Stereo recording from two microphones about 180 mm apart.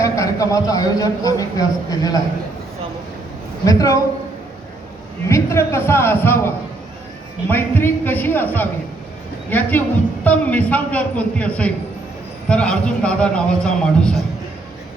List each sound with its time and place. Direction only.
0.0 s a man's voice: 15° left (ahead or behind)
3.7 s a man's voice: 20° left (ahead or behind)
5.3 s a man's voice: 15° left (ahead or behind)